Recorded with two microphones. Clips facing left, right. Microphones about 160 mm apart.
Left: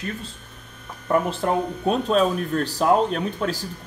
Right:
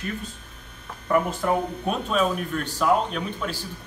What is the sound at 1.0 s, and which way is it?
Speech, 25° left (ahead or behind).